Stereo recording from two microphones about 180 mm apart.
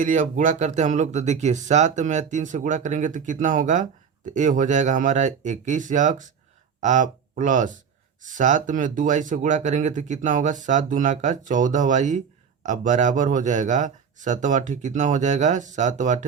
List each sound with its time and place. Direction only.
0.0 s speech: 45° right (ahead or behind)